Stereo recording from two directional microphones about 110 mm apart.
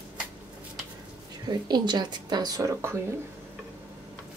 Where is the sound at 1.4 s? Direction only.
40° right (ahead or behind).